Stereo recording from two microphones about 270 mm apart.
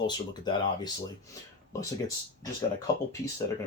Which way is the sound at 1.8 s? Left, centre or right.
Centre.